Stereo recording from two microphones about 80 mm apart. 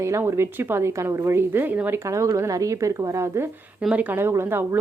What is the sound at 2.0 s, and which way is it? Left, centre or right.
A woman's voice, right.